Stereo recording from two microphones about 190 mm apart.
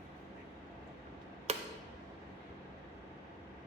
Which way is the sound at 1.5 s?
35° right (ahead or behind).